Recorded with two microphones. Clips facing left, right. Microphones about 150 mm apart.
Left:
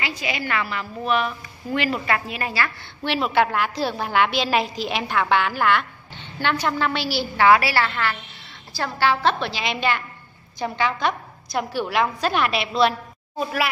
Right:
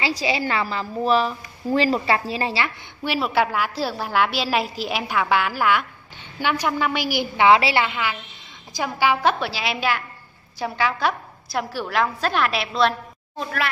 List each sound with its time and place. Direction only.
0.0 s a woman's voice: 30° right (ahead or behind)
3.0 s a woman's voice: 5° right (ahead or behind)